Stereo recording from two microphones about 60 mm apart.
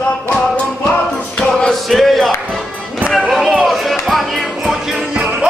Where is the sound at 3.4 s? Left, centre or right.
Centre.